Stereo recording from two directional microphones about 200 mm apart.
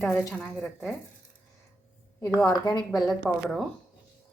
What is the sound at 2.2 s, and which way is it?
Speech, 5° left (ahead or behind).